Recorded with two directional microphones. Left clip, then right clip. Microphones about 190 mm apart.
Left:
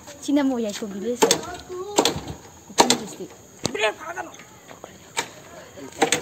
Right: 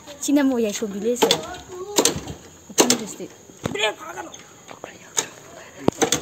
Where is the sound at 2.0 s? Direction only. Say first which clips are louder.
Even; 55° right (ahead or behind).